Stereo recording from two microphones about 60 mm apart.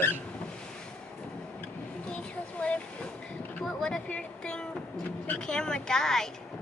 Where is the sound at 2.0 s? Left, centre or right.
Centre.